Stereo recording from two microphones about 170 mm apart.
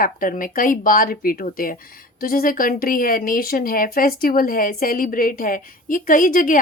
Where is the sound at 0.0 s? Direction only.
55° left (ahead or behind).